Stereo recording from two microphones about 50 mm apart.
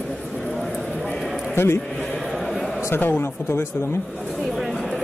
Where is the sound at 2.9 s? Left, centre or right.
Left.